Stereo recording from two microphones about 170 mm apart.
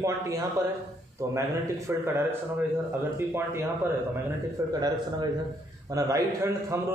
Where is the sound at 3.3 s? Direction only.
15° right (ahead or behind).